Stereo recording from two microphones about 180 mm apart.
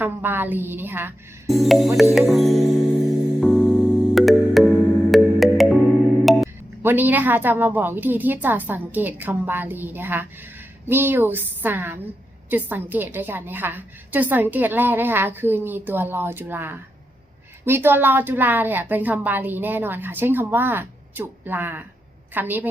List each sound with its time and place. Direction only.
0.0 s a woman's voice: 10° right (ahead or behind)
1.5 s music: centre (ahead or behind)
6.8 s a woman's voice: 10° right (ahead or behind)